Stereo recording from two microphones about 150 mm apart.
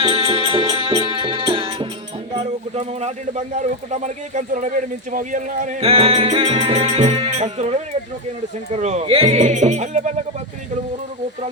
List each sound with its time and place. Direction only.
0.0 s music: 40° right (ahead or behind)
2.7 s speech: 50° right (ahead or behind)
5.8 s music: 40° right (ahead or behind)